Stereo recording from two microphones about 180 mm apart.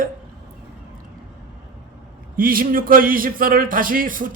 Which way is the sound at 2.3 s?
50° right (ahead or behind).